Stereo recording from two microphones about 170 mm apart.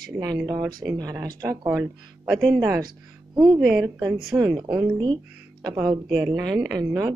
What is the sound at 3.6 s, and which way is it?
Speech, 5° right (ahead or behind).